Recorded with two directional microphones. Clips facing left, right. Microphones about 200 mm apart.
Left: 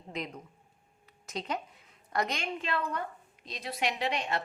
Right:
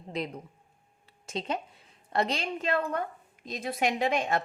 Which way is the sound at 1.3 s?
25° right (ahead or behind).